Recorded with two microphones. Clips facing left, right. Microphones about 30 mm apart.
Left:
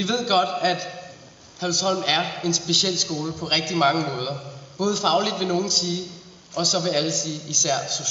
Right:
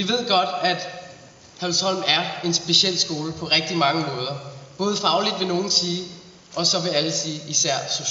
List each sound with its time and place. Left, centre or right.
0.0 s a man's voice: centre